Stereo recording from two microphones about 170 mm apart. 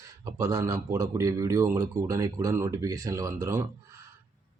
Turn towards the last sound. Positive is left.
turn(degrees=-20)  # may be behind; listen again after turning